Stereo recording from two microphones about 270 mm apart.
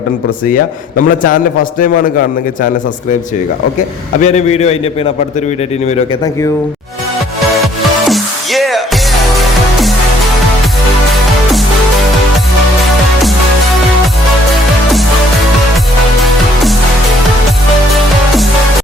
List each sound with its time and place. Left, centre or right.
0.4 s a man's voice: left
4.2 s a man's voice: left
7.5 s music: centre